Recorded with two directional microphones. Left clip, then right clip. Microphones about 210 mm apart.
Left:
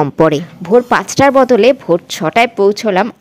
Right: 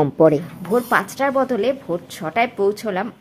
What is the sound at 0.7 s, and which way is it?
Speech, 35° left (ahead or behind).